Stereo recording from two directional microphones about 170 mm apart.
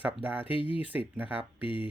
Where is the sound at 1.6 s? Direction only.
30° left (ahead or behind).